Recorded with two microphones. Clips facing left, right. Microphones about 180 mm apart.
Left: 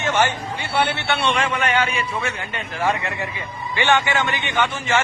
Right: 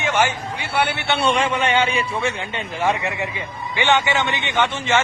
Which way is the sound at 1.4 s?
30° right (ahead or behind).